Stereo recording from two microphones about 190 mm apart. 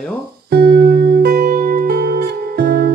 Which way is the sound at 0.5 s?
55° right (ahead or behind).